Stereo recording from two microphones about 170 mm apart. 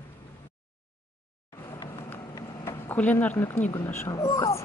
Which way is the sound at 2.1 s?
15° left (ahead or behind).